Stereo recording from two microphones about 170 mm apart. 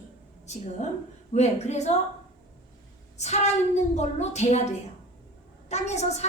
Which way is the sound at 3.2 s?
40° left (ahead or behind).